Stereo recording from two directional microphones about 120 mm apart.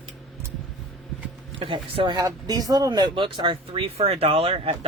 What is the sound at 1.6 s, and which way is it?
Speech, 45° right (ahead or behind).